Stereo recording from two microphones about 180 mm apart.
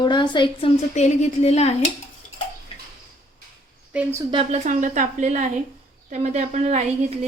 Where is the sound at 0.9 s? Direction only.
40° left (ahead or behind).